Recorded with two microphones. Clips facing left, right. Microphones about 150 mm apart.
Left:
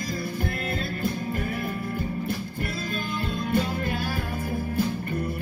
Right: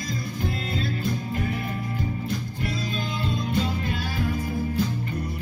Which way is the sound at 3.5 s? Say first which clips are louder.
Left 4 dB; 55° left (ahead or behind).